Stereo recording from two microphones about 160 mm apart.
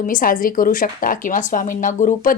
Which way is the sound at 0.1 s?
60° left (ahead or behind).